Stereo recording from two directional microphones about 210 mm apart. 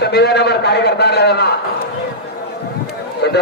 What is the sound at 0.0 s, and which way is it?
A man's voice, 50° left (ahead or behind).